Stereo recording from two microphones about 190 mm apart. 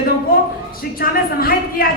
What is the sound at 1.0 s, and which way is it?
Speech, 50° left (ahead or behind).